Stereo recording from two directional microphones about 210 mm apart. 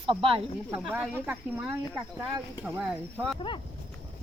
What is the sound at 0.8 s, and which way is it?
Speech, 5° right (ahead or behind).